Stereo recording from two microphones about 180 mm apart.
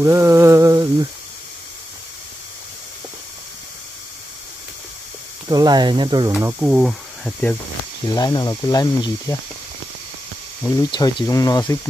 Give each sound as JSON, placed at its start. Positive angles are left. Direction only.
{"t": 0.0, "sound": "a sound", "side_deg": -15}
{"t": 5.5, "sound": "speech", "side_deg": -20}
{"t": 6.3, "sound": "speech", "side_deg": -10}
{"t": 8.1, "sound": "speech", "side_deg": 20}
{"t": 10.8, "sound": "speech", "side_deg": 20}